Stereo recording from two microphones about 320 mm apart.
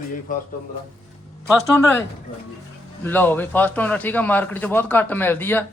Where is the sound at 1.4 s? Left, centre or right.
Centre.